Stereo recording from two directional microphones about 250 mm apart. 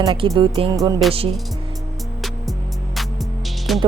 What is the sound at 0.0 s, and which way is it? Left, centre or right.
Music, centre.